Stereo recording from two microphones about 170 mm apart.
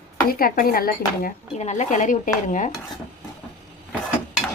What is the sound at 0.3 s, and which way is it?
Speech, 60° left (ahead or behind).